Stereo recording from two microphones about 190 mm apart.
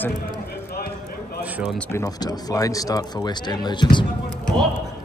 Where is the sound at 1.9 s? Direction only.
20° left (ahead or behind).